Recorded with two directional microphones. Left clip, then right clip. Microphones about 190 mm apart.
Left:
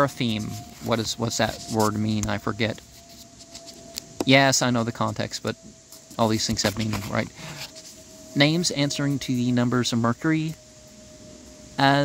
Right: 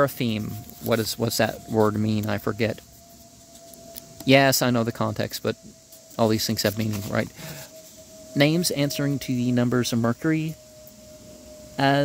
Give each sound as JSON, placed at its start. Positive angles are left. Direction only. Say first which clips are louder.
{"t": 0.0, "sound": "speech", "louder": "even", "side_deg": -25}
{"t": 4.3, "sound": "speech", "louder": "right 1 dB", "side_deg": -30}
{"t": 11.7, "sound": "speech", "louder": "left 2 dB", "side_deg": -15}